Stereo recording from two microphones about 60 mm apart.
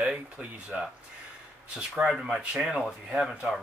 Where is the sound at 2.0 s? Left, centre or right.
Centre.